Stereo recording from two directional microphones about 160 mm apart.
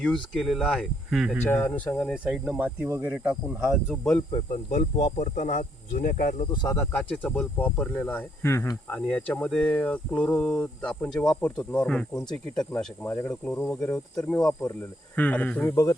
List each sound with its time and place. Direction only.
0.0 s speech: 5° left (ahead or behind)
1.5 s speech: 10° left (ahead or behind)
2.1 s speech: 5° right (ahead or behind)
4.5 s speech: 45° left (ahead or behind)
6.5 s speech: 25° left (ahead or behind)
6.7 s speech: 10° left (ahead or behind)
8.9 s speech: 5° left (ahead or behind)
15.7 s speech: 20° left (ahead or behind)